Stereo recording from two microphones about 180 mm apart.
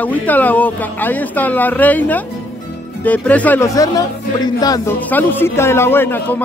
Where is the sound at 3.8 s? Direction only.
20° left (ahead or behind).